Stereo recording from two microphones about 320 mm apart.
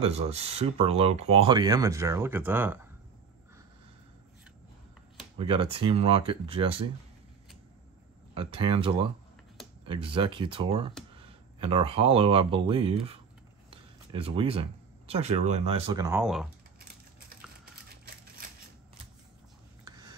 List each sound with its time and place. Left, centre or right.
0.0 s speech: centre
5.4 s speech: centre
8.4 s speech: centre
19.8 s a sound: centre